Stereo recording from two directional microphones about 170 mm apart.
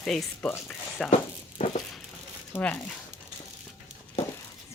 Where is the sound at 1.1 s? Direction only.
35° left (ahead or behind).